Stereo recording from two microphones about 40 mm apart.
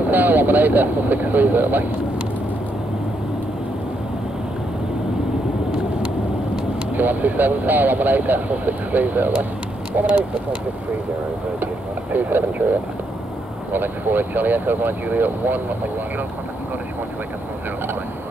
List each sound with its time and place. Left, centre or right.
0.1 s speech: right
6.9 s speech: right
11.6 s speech: right
13.7 s speech: right